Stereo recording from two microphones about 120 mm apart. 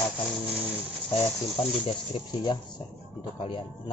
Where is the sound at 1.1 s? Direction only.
50° left (ahead or behind).